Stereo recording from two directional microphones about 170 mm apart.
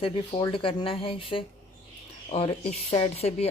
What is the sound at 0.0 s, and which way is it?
Speech, 30° left (ahead or behind).